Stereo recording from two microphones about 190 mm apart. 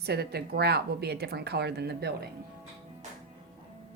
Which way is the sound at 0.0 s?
60° right (ahead or behind).